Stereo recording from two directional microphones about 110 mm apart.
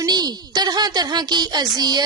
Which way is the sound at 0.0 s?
35° right (ahead or behind).